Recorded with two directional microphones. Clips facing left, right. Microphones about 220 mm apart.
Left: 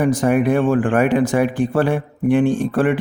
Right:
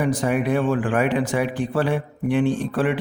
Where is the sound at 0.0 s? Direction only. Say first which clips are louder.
Left 5 dB; 45° left (ahead or behind).